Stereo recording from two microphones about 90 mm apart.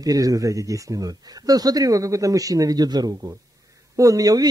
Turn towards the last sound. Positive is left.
turn(degrees=-40)  # may be behind; listen again after turning